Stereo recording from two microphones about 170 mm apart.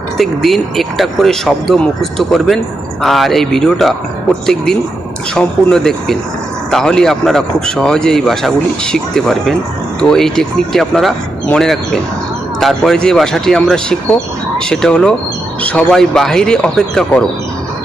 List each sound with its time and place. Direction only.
0.2 s speech: centre (ahead or behind)